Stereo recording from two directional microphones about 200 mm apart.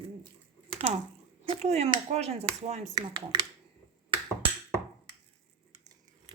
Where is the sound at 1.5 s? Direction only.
30° right (ahead or behind).